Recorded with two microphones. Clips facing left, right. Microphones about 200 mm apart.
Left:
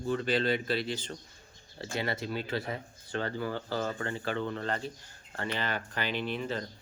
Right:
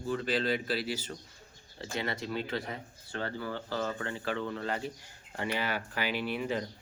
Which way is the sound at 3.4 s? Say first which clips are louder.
Left 2 dB; 40° left (ahead or behind).